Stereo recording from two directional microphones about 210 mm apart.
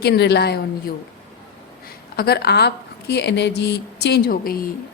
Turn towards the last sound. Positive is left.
turn(degrees=45)  # may be behind; listen again after turning